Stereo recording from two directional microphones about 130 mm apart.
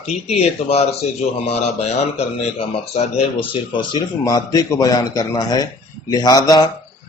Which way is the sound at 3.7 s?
35° left (ahead or behind).